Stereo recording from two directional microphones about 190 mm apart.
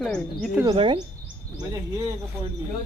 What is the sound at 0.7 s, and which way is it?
Speech, 25° right (ahead or behind).